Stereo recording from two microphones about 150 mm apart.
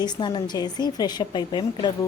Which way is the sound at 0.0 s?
30° left (ahead or behind).